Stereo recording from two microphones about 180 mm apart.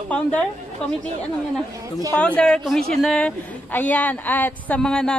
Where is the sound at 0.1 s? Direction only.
5° left (ahead or behind).